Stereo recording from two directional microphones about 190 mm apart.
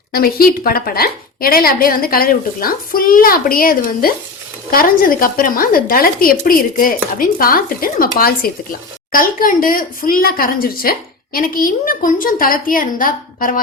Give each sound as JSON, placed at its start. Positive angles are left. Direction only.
{"t": 0.1, "sound": "a woman's voice", "side_deg": 50}